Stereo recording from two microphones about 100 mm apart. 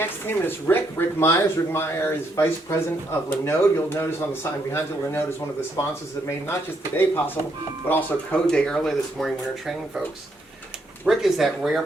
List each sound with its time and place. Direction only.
0.0 s speech: 20° left (ahead or behind)
8.4 s speech: 10° left (ahead or behind)
11.0 s speech: centre (ahead or behind)